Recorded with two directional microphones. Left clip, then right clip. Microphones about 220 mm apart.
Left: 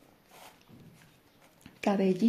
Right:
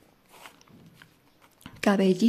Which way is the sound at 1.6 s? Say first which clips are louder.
Right 5 dB; 20° right (ahead or behind).